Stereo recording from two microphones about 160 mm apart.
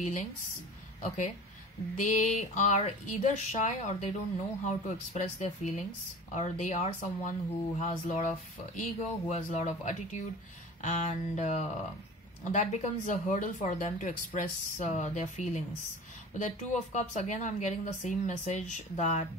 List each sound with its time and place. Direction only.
0.0 s speech: 50° left (ahead or behind)